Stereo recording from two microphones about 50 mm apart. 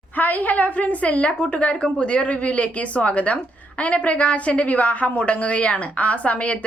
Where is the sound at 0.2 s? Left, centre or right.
Left.